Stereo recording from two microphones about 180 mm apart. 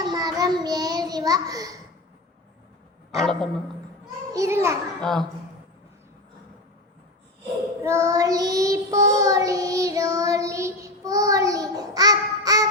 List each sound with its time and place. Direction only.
0.0 s child singing: 20° right (ahead or behind)
3.2 s a man's voice: centre (ahead or behind)
4.3 s a child's voice: 15° right (ahead or behind)
4.9 s a woman's voice: centre (ahead or behind)
7.8 s child singing: 15° right (ahead or behind)